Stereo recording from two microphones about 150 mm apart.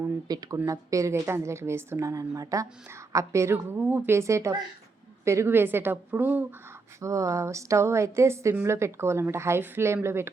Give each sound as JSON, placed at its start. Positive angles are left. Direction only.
{"t": 0.0, "sound": "a woman's voice", "side_deg": -25}